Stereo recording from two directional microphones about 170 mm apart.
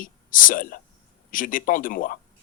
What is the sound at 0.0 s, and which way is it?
Speech, 55° left (ahead or behind).